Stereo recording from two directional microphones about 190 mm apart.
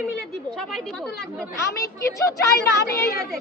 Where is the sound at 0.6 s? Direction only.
Centre (ahead or behind).